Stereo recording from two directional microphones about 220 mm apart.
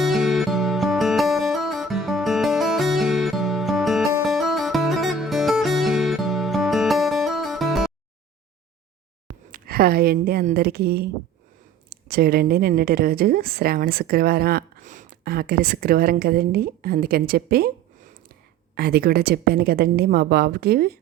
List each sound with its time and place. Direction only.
0.0 s music: centre (ahead or behind)
9.5 s a woman's voice: 40° right (ahead or behind)
18.7 s speech: 45° right (ahead or behind)